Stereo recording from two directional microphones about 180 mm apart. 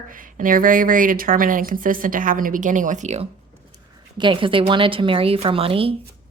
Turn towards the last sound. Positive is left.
turn(degrees=-30)  # may be behind; listen again after turning